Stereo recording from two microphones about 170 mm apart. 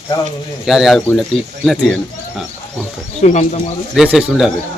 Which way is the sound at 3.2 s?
40° left (ahead or behind).